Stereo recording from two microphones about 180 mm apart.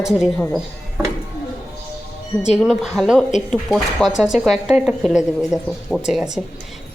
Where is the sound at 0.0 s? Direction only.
5° right (ahead or behind).